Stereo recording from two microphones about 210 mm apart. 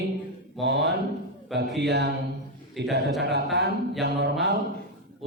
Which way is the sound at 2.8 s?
Centre (ahead or behind).